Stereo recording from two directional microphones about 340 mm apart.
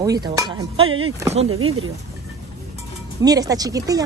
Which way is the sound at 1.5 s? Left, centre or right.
Right.